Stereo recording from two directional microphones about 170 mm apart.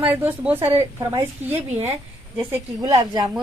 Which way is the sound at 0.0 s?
10° right (ahead or behind).